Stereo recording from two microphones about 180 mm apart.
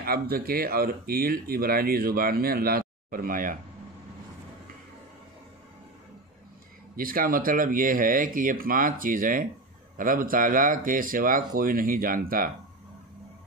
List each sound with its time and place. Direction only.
0.0 s speech: 55° right (ahead or behind)
7.0 s speech: 50° right (ahead or behind)